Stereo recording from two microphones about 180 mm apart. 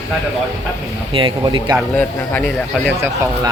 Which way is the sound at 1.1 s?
25° right (ahead or behind).